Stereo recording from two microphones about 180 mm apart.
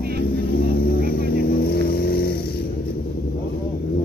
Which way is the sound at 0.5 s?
55° left (ahead or behind).